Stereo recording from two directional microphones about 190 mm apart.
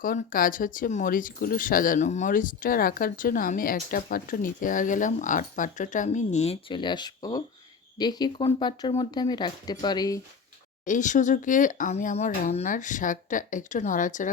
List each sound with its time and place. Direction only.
0.0 s speech: 45° left (ahead or behind); by 10.2 s 20° left (ahead or behind)
10.8 s speech: 40° left (ahead or behind)